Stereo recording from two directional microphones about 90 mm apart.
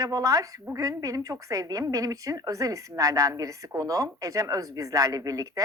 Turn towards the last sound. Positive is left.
turn(degrees=-40)  # may be behind; listen again after turning